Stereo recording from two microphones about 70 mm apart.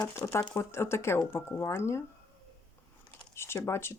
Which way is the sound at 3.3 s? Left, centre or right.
Left.